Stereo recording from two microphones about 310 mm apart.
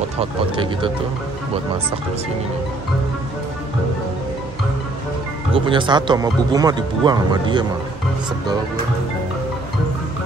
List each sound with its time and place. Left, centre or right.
0.2 s speech: centre
5.5 s speech: centre